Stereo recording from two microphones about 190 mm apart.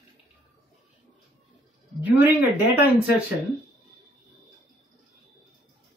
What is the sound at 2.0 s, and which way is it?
Speech, 10° right (ahead or behind).